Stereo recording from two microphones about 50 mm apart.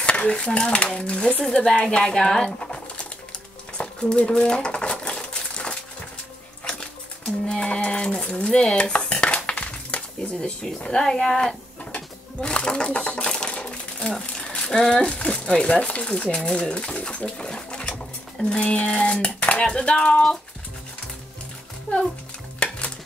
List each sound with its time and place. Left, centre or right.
0.0 s dishes: left
0.3 s speech: centre
3.7 s a sound: centre
8.3 s dishes: centre
11.0 s speech: centre
11.8 s sewing machine: left
14.5 s a sound: centre
14.8 s speech: centre
22.6 s dishes: left